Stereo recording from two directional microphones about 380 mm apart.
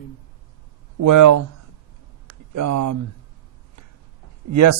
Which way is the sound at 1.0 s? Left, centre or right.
Right.